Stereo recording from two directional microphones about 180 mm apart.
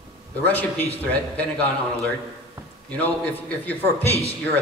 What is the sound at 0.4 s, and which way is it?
Speech, 10° left (ahead or behind).